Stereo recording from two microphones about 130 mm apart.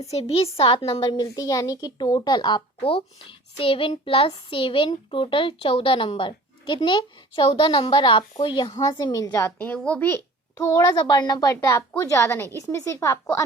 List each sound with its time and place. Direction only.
0.1 s a child's voice: 50° left (ahead or behind); by 9.3 s 30° left (ahead or behind)
9.3 s a woman's voice: 15° left (ahead or behind)